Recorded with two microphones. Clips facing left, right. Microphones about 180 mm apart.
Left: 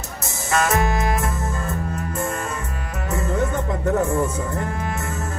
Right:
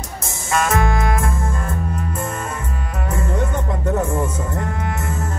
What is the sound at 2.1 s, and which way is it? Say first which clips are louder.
Music: even; 25° right (ahead or behind).